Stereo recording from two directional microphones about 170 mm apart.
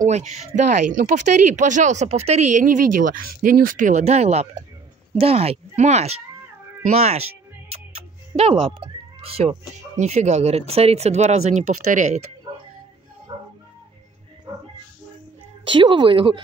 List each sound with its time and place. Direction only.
0.0 s speech: 40° right (ahead or behind)
8.4 s speech: 35° right (ahead or behind)
13.3 s music: 30° right (ahead or behind)
15.6 s speech: 30° right (ahead or behind)